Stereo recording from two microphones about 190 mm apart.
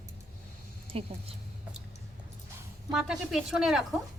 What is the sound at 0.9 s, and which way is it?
Speech, 30° right (ahead or behind).